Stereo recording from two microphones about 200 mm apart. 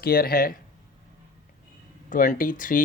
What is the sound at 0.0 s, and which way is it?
Speech, 50° left (ahead or behind).